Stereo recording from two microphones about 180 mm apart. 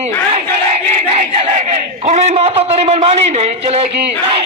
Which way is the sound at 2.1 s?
40° right (ahead or behind).